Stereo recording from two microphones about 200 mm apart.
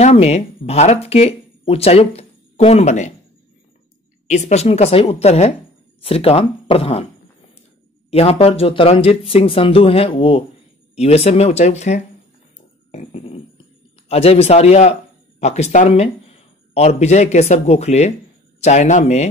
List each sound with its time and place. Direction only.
0.0 s speech: 30° left (ahead or behind)
4.3 s speech: 35° left (ahead or behind)
8.1 s speech: 30° left (ahead or behind)
12.9 s a sound: 30° left (ahead or behind)
14.0 s speech: 30° left (ahead or behind)